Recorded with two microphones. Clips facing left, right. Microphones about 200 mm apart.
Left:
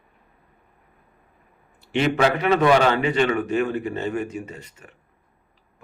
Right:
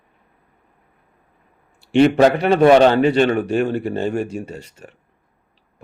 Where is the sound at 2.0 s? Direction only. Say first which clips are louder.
Right 5 dB; 35° right (ahead or behind).